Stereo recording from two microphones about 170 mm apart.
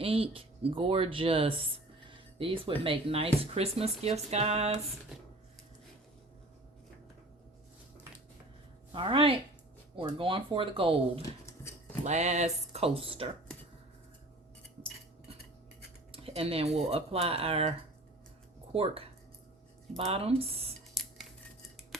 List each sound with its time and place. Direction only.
0.0 s speech: 35° right (ahead or behind)
8.9 s speech: 30° right (ahead or behind)
12.0 s speech: 40° right (ahead or behind)
16.1 s speech: 35° right (ahead or behind)
20.1 s speech: 35° right (ahead or behind)
21.0 s scissors: centre (ahead or behind)